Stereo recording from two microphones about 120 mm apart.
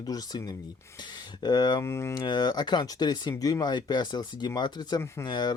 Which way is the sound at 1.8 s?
20° left (ahead or behind).